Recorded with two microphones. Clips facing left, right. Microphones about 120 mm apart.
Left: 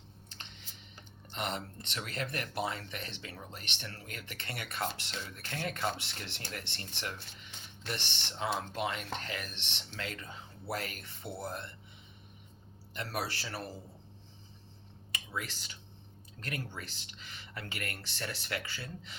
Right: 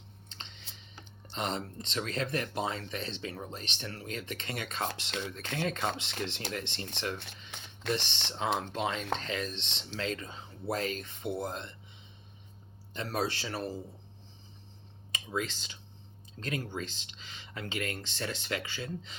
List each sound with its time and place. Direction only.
0.3 s a sound: 20° right (ahead or behind)
1.3 s speech: 20° right (ahead or behind)
12.9 s speech: 20° right (ahead or behind)
15.1 s speech: 20° right (ahead or behind)